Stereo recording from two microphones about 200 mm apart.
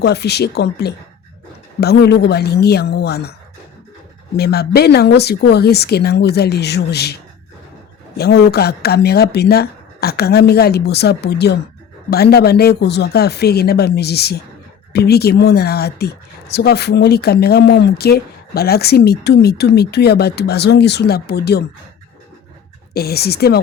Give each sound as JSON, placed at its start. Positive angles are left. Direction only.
{"t": 0.0, "sound": "speech", "side_deg": 55}
{"t": 4.4, "sound": "speech", "side_deg": 55}
{"t": 23.0, "sound": "speech", "side_deg": 50}